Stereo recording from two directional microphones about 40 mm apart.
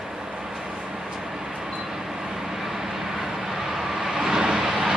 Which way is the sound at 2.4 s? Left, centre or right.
Centre.